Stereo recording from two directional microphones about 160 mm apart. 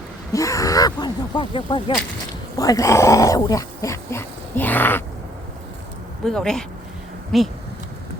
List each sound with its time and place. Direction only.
0.3 s a sound: 20° left (ahead or behind)
2.6 s speech: 20° left (ahead or behind)
6.2 s speech: 5° left (ahead or behind)